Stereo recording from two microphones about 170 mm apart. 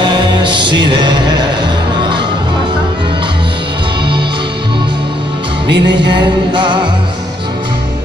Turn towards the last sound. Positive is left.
turn(degrees=-25)  # may be behind; listen again after turning